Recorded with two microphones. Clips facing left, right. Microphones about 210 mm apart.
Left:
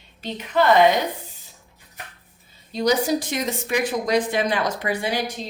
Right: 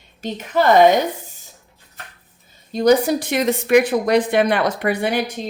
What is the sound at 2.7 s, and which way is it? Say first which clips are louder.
Speech: right 5 dB; 55° right (ahead or behind).